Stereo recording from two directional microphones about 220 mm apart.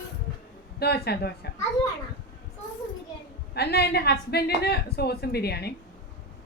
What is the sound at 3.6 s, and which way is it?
A woman's voice, 45° left (ahead or behind).